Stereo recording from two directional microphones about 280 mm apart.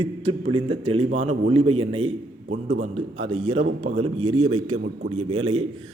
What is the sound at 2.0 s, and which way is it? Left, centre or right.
A man's voice, right.